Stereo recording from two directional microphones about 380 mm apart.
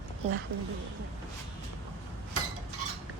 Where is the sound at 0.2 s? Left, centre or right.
Centre.